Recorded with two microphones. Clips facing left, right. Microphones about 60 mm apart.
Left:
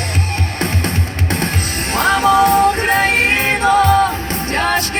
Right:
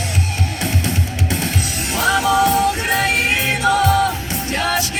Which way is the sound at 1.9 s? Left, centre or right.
Left.